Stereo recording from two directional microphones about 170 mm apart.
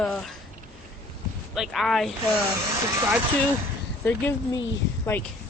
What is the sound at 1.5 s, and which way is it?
Speech, centre (ahead or behind).